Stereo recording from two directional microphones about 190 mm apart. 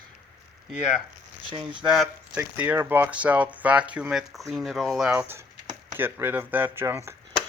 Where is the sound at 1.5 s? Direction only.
25° right (ahead or behind).